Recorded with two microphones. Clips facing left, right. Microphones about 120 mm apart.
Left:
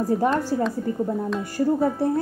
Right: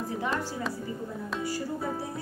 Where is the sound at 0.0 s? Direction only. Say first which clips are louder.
Left 10 dB; 45° left (ahead or behind).